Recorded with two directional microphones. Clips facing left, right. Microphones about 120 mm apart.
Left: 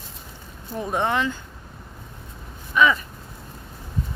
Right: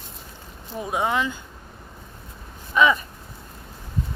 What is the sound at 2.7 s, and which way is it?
Speech, 20° right (ahead or behind).